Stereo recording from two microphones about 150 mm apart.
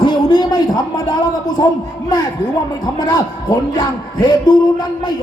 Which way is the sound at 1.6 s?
25° left (ahead or behind).